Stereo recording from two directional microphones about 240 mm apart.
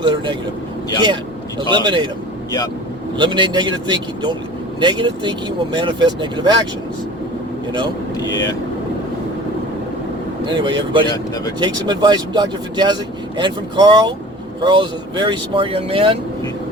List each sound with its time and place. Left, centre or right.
0.0 s speech: centre
3.2 s speech: centre
10.4 s speech: centre